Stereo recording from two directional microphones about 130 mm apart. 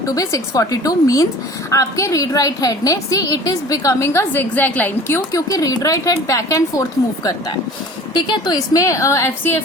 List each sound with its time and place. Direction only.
0.0 s a woman's voice: 25° left (ahead or behind)
8.1 s a woman's voice: 35° left (ahead or behind); by 9.6 s 20° left (ahead or behind)